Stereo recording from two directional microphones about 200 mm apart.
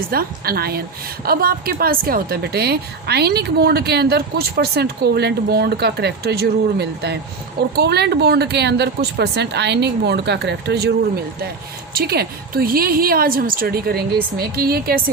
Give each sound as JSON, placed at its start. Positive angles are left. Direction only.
{"t": 0.1, "sound": "a woman's voice", "side_deg": -50}
{"t": 11.9, "sound": "a woman's voice", "side_deg": -50}